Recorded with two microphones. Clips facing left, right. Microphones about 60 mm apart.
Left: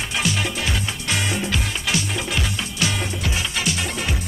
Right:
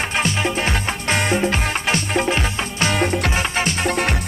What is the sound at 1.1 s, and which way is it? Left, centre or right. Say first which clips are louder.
Music: right 6 dB; right.